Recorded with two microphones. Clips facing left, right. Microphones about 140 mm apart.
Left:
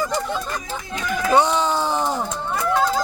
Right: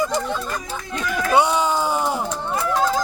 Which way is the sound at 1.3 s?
10° right (ahead or behind).